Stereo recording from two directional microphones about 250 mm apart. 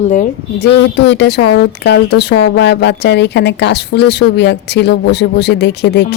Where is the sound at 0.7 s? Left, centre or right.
Left.